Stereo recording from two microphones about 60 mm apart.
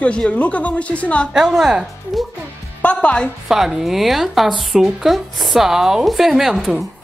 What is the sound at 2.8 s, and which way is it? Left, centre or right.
Speech, left.